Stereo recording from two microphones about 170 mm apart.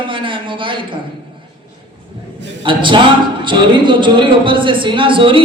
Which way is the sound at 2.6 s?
30° right (ahead or behind).